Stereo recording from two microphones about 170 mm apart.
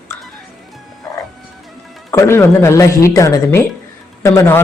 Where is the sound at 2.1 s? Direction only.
15° left (ahead or behind).